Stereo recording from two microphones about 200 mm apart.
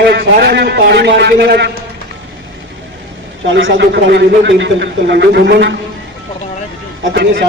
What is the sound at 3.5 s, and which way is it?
A man's voice, 70° right (ahead or behind).